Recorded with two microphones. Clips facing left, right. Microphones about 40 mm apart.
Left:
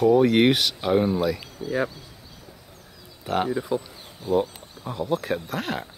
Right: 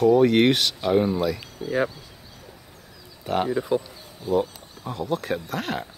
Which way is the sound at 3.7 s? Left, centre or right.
Right.